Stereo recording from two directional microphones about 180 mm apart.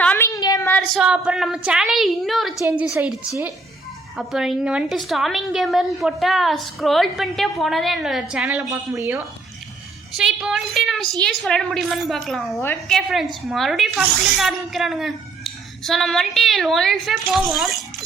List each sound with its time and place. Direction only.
0.0 s a sound: 10° left (ahead or behind)
0.9 s a woman's voice: 5° right (ahead or behind)
8.6 s speech: 20° right (ahead or behind)
10.1 s a woman's voice: centre (ahead or behind)